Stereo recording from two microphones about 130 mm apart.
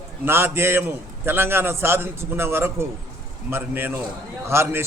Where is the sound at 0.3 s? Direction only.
15° right (ahead or behind).